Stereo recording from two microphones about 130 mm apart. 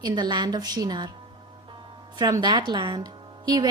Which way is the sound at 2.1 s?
30° right (ahead or behind).